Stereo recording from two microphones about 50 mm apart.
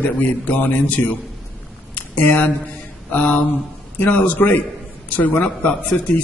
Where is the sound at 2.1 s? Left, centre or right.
Left.